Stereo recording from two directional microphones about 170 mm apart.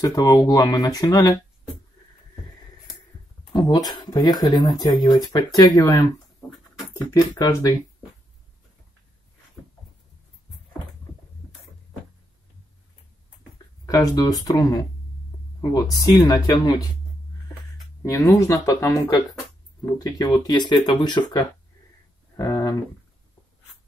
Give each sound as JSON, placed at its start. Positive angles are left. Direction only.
{"t": 0.0, "sound": "speech", "side_deg": 20}
{"t": 3.5, "sound": "speech", "side_deg": 20}
{"t": 13.8, "sound": "speech", "side_deg": 20}
{"t": 18.0, "sound": "speech", "side_deg": 20}